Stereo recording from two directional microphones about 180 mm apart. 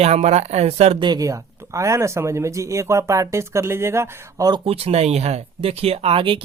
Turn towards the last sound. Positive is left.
turn(degrees=-30)  # may be behind; listen again after turning